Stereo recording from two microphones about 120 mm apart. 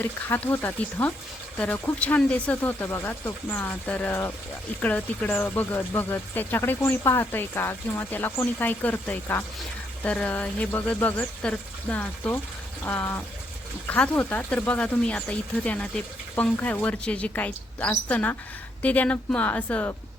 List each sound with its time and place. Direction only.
0.0 s speech: 15° left (ahead or behind)